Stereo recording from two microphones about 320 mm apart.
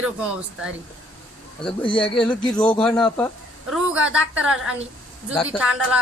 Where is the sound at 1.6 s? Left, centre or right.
Centre.